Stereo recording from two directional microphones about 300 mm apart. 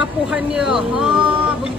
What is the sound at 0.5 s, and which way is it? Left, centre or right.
Speech, centre.